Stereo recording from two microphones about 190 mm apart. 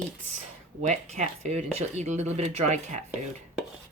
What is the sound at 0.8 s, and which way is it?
Speech, 35° right (ahead or behind).